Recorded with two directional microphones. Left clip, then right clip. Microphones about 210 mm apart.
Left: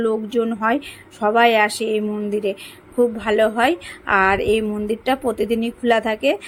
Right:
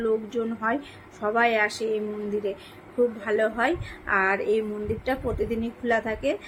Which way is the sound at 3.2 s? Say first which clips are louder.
Left 7 dB; 45° left (ahead or behind).